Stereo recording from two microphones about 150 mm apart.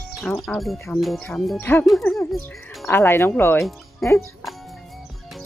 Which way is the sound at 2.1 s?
Centre (ahead or behind).